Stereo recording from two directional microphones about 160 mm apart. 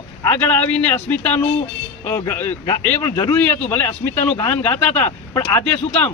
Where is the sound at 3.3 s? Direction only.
10° left (ahead or behind).